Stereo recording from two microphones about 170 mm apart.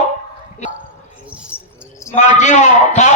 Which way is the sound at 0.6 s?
40° left (ahead or behind).